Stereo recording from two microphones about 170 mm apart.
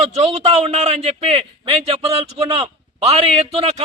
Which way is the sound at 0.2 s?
40° right (ahead or behind).